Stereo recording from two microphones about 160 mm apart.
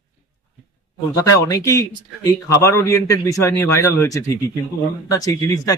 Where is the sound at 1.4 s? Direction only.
20° left (ahead or behind).